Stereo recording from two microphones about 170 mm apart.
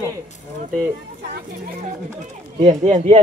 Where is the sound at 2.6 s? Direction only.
40° right (ahead or behind).